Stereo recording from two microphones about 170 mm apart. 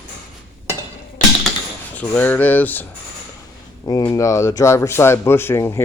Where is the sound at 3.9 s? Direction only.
20° left (ahead or behind).